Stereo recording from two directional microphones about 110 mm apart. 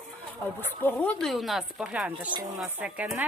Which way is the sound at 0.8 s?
15° left (ahead or behind).